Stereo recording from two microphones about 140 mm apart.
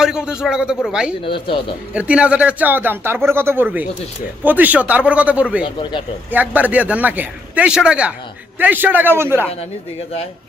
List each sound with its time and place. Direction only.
0.0 s a man's voice: 5° right (ahead or behind)
1.2 s speech: 40° left (ahead or behind)
1.9 s speech: 10° right (ahead or behind)
5.6 s speech: 35° left (ahead or behind)
6.3 s speech: 10° right (ahead or behind)